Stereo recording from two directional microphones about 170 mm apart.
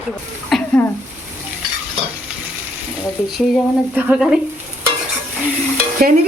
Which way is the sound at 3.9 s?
10° right (ahead or behind).